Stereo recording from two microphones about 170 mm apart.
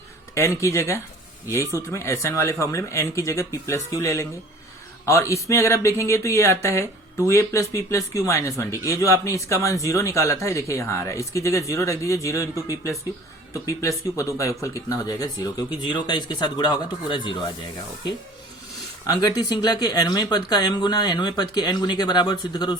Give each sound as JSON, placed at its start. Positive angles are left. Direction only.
{"t": 0.3, "sound": "speech", "side_deg": 15}
{"t": 19.0, "sound": "speech", "side_deg": 20}